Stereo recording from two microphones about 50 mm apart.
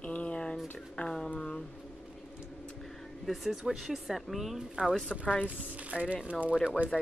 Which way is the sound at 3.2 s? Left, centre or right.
Centre.